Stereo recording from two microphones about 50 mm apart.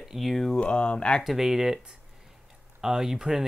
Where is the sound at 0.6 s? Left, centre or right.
Left.